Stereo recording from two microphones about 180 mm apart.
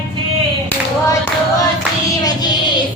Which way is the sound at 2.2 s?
25° left (ahead or behind).